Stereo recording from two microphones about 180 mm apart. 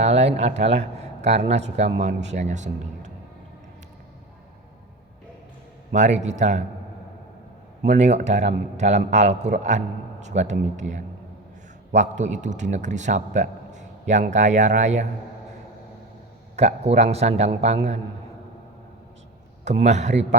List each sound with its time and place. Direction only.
0.0 s a man's voice: 35° right (ahead or behind)
5.9 s a man's voice: 40° right (ahead or behind)
7.8 s a man's voice: 40° right (ahead or behind)
16.6 s a man's voice: 35° right (ahead or behind)
19.6 s a man's voice: 40° right (ahead or behind)